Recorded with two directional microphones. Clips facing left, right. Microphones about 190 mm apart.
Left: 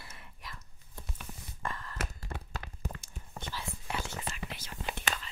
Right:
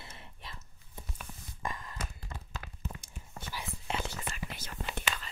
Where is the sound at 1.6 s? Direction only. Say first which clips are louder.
Even; 15° right (ahead or behind).